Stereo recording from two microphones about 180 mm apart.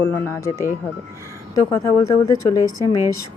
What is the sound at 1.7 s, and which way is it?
A woman's voice, 15° left (ahead or behind).